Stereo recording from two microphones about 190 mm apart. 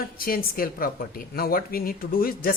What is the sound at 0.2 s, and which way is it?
Speech, 50° left (ahead or behind).